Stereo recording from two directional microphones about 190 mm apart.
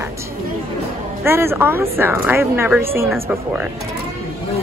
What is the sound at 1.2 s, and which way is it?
A child's voice, 10° right (ahead or behind).